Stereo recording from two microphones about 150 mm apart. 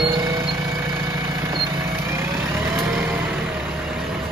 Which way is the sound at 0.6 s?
20° right (ahead or behind).